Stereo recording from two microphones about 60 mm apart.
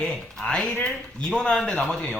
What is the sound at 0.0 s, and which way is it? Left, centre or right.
Speech, centre.